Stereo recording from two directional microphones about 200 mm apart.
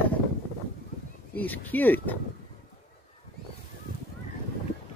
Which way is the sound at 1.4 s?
10° left (ahead or behind).